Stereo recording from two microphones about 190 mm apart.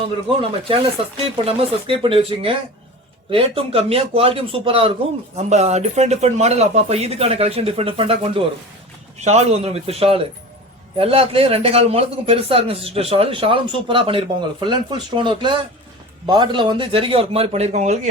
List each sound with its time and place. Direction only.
1.5 s speech: 30° right (ahead or behind)